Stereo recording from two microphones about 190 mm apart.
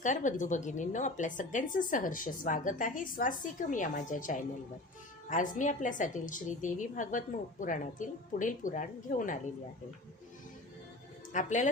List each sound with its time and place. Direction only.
0.0 s a woman's voice: 40° left (ahead or behind)
11.3 s speech: 40° left (ahead or behind)